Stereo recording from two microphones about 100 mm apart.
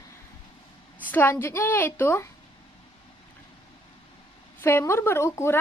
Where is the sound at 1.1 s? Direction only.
20° left (ahead or behind).